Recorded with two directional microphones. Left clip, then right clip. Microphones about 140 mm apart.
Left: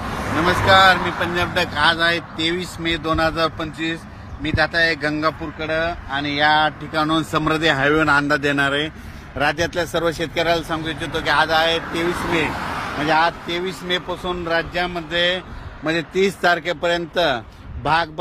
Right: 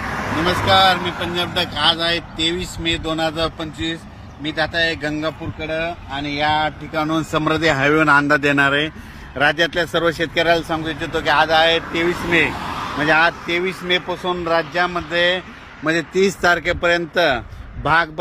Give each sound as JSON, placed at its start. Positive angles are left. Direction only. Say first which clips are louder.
{"t": 0.1, "sound": "vehicle", "louder": "even", "side_deg": -50}
{"t": 0.7, "sound": "speech", "louder": "left 2 dB", "side_deg": 10}
{"t": 2.8, "sound": "speech", "louder": "left 1 dB", "side_deg": -10}
{"t": 4.7, "sound": "speech", "louder": "left 1 dB", "side_deg": -20}
{"t": 6.3, "sound": "speech", "louder": "left 2 dB", "side_deg": -35}
{"t": 6.9, "sound": "speech", "louder": "left 1 dB", "side_deg": -65}
{"t": 8.3, "sound": "speech", "louder": "right 3 dB", "side_deg": -45}
{"t": 15.8, "sound": "speech", "louder": "right 2 dB", "side_deg": -50}